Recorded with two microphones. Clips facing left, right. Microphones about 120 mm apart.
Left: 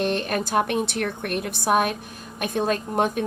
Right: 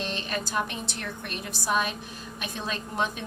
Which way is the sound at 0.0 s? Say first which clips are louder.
Left 8 dB; 55° left (ahead or behind).